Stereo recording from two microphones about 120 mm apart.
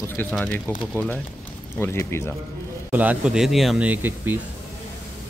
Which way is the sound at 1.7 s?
20° left (ahead or behind).